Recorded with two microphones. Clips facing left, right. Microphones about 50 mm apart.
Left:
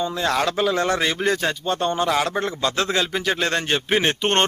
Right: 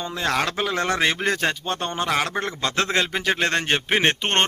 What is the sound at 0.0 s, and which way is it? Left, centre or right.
A man's voice, right.